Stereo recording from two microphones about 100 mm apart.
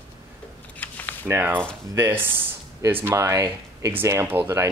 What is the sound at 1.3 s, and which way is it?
Speech, 20° right (ahead or behind).